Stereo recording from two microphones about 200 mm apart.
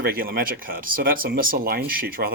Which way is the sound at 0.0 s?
45° right (ahead or behind).